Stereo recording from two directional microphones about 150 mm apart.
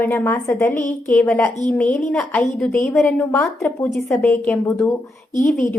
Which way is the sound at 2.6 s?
15° left (ahead or behind).